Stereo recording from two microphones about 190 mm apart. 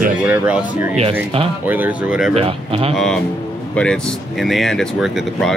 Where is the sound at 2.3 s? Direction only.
30° right (ahead or behind).